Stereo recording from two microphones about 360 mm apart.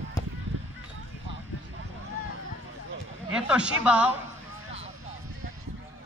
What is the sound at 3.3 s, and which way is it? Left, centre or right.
Speech, centre.